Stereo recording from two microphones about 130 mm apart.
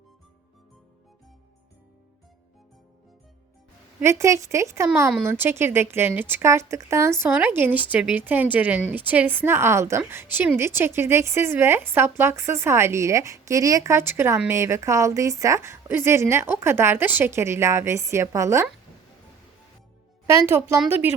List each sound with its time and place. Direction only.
4.0 s a woman's voice: 20° right (ahead or behind)
20.2 s a woman's voice: 20° right (ahead or behind)